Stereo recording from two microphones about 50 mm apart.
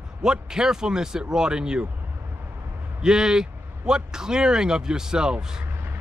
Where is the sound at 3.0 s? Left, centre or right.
Centre.